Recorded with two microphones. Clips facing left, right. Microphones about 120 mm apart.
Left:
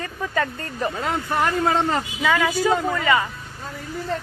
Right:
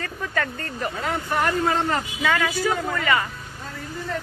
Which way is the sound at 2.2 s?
10° left (ahead or behind).